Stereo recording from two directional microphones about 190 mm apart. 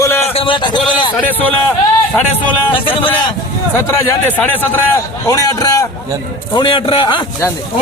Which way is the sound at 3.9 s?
10° left (ahead or behind).